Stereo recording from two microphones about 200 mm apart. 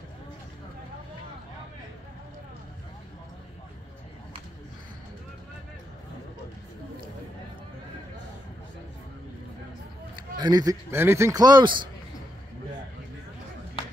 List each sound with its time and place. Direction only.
10.1 s speech: 20° right (ahead or behind)